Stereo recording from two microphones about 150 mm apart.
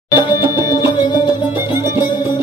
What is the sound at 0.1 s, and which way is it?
Music, 30° left (ahead or behind).